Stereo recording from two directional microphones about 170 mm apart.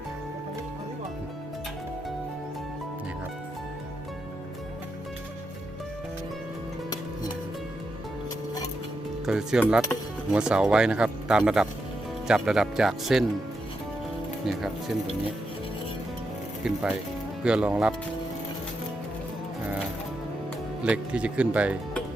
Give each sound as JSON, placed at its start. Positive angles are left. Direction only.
{"t": 9.2, "sound": "speech", "side_deg": -5}
{"t": 14.4, "sound": "speech", "side_deg": 0}
{"t": 16.7, "sound": "speech", "side_deg": -5}
{"t": 20.8, "sound": "speech", "side_deg": -5}